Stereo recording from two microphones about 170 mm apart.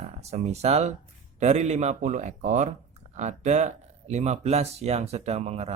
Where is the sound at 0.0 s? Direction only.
40° right (ahead or behind).